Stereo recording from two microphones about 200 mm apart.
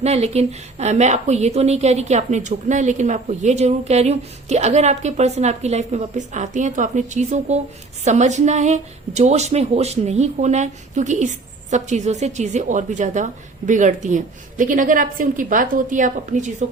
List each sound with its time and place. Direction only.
0.0 s a woman's voice: 35° right (ahead or behind)